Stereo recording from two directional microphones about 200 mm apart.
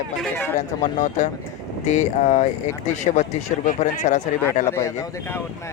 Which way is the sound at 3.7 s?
35° left (ahead or behind).